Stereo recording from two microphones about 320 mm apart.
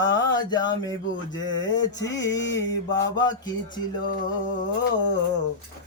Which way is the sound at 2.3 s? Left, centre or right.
Left.